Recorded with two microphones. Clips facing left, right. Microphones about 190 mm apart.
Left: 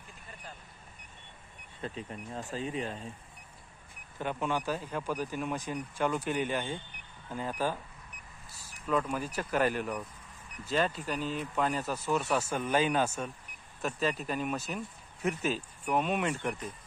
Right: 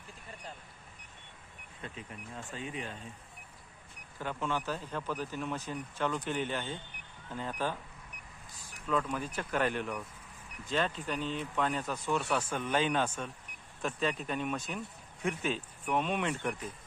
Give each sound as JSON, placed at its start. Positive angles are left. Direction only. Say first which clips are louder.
{"t": 1.8, "sound": "speech", "louder": "left 6 dB", "side_deg": 35}
{"t": 4.2, "sound": "speech", "louder": "left 3 dB", "side_deg": 15}
{"t": 8.9, "sound": "speech", "louder": "left 2 dB", "side_deg": 10}